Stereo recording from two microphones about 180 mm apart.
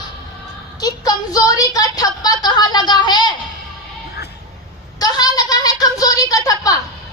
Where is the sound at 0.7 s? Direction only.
20° left (ahead or behind).